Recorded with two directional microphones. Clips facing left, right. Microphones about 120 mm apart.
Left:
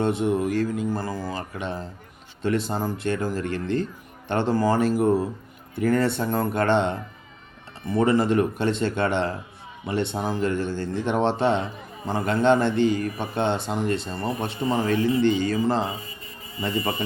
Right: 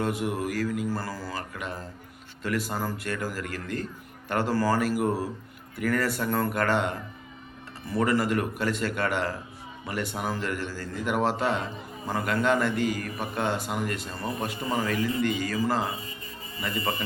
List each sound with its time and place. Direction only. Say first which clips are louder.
0.0 s speech: left 6 dB; 25° left (ahead or behind)